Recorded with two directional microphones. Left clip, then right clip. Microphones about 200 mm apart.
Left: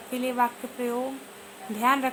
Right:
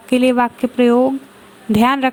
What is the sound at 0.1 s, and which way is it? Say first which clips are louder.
Speech: right 11 dB; 40° right (ahead or behind).